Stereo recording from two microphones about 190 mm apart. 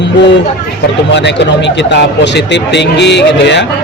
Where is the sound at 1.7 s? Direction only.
65° left (ahead or behind).